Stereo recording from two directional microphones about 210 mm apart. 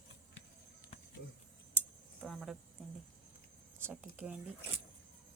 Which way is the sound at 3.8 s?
10° right (ahead or behind).